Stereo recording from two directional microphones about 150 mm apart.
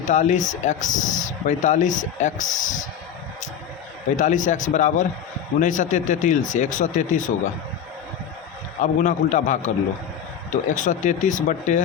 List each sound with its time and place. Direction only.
0.1 s speech: 50° left (ahead or behind)
4.2 s speech: 55° left (ahead or behind)
8.8 s speech: 55° left (ahead or behind)